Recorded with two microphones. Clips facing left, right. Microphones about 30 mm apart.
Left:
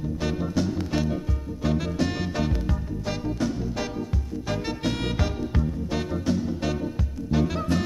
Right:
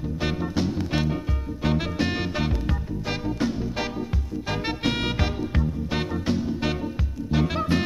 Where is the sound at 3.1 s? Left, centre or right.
Right.